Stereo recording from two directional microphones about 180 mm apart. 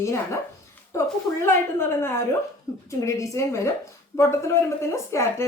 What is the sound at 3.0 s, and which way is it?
A woman's voice, 15° left (ahead or behind).